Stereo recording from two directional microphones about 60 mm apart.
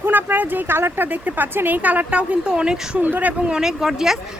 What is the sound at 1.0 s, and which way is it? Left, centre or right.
Speech, right.